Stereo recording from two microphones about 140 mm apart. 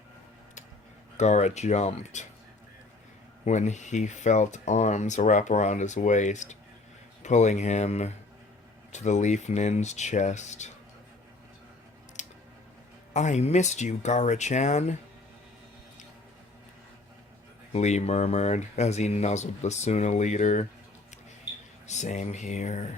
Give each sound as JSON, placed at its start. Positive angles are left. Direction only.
{"t": 1.1, "sound": "speech", "side_deg": 55}
{"t": 3.4, "sound": "speech", "side_deg": 55}
{"t": 12.2, "sound": "a sound", "side_deg": 60}
{"t": 13.1, "sound": "speech", "side_deg": 55}
{"t": 17.7, "sound": "speech", "side_deg": 55}
{"t": 21.8, "sound": "speech", "side_deg": 55}